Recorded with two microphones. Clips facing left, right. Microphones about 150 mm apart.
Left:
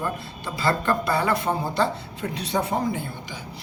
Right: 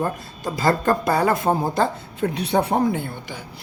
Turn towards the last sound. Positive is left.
turn(degrees=-60)  # may be behind; listen again after turning